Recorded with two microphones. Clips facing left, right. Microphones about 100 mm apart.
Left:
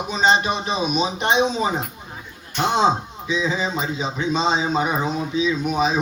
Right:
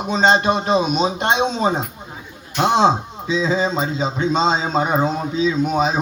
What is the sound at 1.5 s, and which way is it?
Speech, 30° right (ahead or behind).